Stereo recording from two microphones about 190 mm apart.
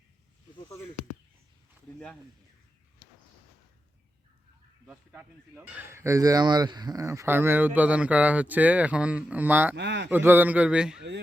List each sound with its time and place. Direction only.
4.9 s speech: 5° right (ahead or behind)
9.7 s a man's voice: 65° right (ahead or behind)
10.1 s speech: 10° right (ahead or behind)